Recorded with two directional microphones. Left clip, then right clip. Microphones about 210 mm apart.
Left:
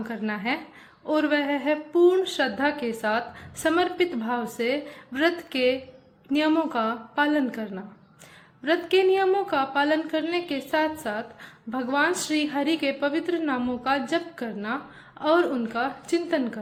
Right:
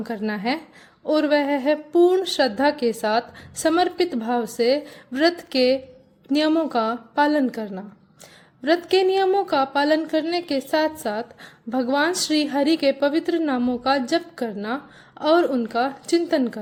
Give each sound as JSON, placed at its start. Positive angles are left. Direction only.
{"t": 0.1, "sound": "a woman's voice", "side_deg": -50}